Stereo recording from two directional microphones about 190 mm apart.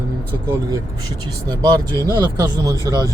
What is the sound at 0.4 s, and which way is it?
Speech, 15° right (ahead or behind).